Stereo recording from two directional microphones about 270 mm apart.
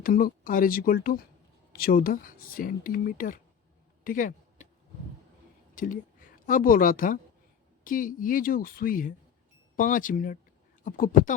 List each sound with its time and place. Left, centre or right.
0.0 s speech: left
4.0 s a sound: left
5.7 s a woman's voice: left